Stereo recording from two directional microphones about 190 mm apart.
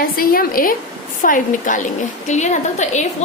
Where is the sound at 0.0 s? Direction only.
50° left (ahead or behind).